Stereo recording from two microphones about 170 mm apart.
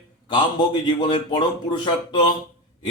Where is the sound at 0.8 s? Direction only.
25° left (ahead or behind).